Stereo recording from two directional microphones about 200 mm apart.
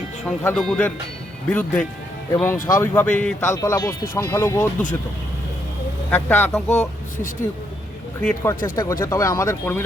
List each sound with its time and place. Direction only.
0.3 s speech: 5° left (ahead or behind)
6.1 s speech: 10° left (ahead or behind)
8.2 s speech: 10° left (ahead or behind)